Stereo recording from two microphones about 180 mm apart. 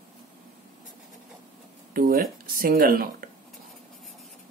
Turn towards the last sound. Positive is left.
turn(degrees=-55)  # may be behind; listen again after turning